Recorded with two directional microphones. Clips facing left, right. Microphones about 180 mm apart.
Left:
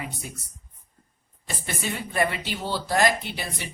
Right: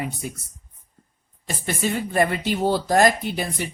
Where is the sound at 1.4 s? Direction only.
45° right (ahead or behind).